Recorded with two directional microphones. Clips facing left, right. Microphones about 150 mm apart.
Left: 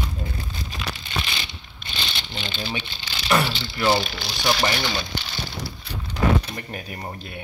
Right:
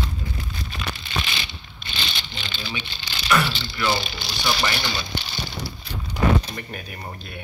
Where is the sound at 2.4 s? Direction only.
30° left (ahead or behind).